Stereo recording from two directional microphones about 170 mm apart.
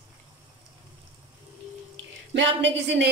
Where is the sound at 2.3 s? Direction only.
90° right.